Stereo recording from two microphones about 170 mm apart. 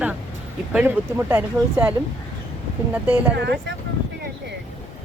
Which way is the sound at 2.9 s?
15° right (ahead or behind).